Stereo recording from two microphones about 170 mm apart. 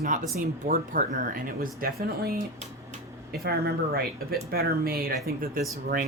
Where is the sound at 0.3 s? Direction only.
50° right (ahead or behind).